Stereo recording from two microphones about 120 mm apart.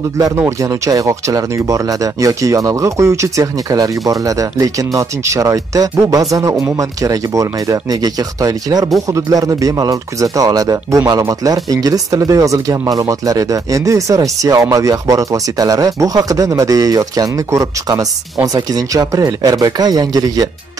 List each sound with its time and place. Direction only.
0.4 s speech: 25° right (ahead or behind)